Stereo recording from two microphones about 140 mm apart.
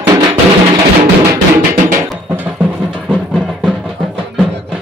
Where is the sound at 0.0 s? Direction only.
25° right (ahead or behind).